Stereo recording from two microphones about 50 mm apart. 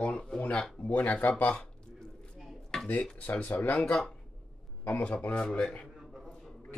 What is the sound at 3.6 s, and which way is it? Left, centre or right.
Speech, left.